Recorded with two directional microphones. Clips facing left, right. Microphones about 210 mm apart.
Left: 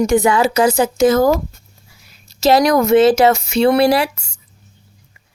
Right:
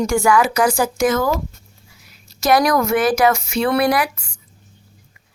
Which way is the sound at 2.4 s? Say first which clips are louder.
Left 3 dB; 25° left (ahead or behind).